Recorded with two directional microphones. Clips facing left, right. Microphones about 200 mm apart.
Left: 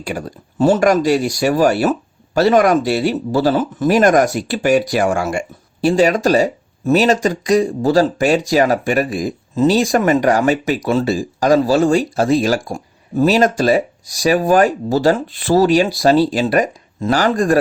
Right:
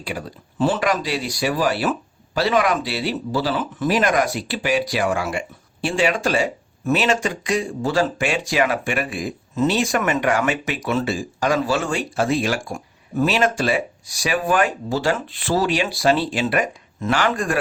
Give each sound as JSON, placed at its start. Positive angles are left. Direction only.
{"t": 0.0, "sound": "speech", "side_deg": 45}